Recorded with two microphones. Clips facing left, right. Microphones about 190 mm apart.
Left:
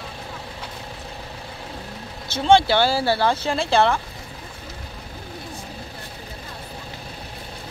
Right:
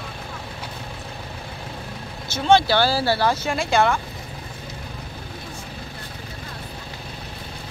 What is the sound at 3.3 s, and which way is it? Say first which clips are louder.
Speech: left 1 dB; 30° left (ahead or behind).